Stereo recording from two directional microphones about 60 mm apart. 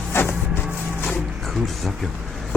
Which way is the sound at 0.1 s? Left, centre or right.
Left.